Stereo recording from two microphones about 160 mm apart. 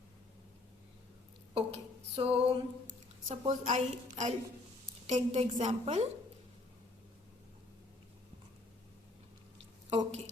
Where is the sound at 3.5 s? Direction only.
50° right (ahead or behind).